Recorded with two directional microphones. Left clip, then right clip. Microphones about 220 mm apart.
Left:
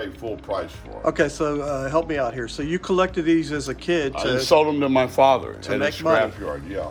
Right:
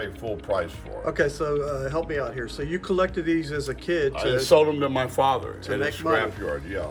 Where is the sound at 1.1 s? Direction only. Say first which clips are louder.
Left 3 dB; 20° left (ahead or behind).